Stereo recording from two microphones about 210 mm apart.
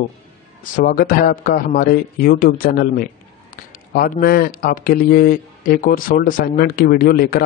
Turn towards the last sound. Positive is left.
turn(degrees=45)  # may be behind; listen again after turning